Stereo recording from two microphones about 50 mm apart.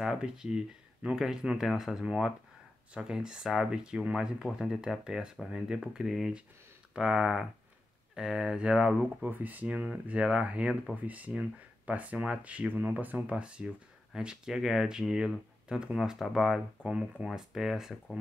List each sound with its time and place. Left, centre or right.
0.0 s speech: centre
9.0 s speech: right
13.4 s speech: right
16.2 s speech: centre
16.8 s speech: centre
17.4 s speech: centre